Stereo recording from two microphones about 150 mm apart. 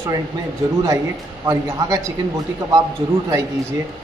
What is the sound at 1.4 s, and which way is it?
Speech, 20° right (ahead or behind).